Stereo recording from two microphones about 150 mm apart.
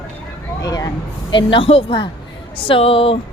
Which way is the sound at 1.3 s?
35° left (ahead or behind).